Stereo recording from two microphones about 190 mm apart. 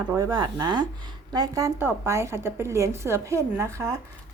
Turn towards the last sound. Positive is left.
turn(degrees=-15)  # may be behind; listen again after turning